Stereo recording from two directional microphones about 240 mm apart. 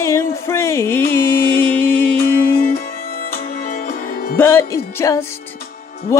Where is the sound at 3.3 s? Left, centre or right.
Left.